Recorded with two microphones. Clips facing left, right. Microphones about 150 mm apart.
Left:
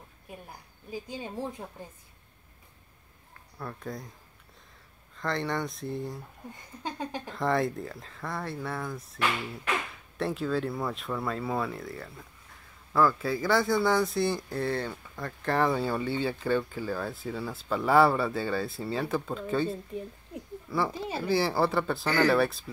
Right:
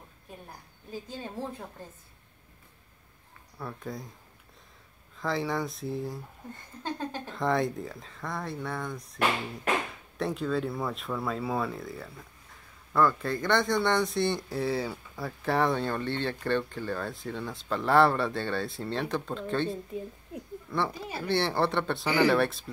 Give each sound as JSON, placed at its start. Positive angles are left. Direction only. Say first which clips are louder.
{"t": 0.3, "sound": "a woman's voice", "louder": "left 1 dB", "side_deg": 10}
{"t": 3.3, "sound": "speech", "louder": "even", "side_deg": 0}
{"t": 5.1, "sound": "speech", "louder": "right 1 dB", "side_deg": 0}
{"t": 6.5, "sound": "a woman's voice", "louder": "right 2 dB", "side_deg": 15}
{"t": 7.3, "sound": "speech", "louder": "even", "side_deg": 0}
{"t": 20.9, "sound": "speech", "louder": "left 4 dB", "side_deg": 25}
{"t": 21.3, "sound": "speech", "louder": "left 1 dB", "side_deg": 5}